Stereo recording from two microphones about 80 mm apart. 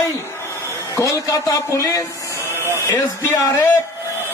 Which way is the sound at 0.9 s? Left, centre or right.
Left.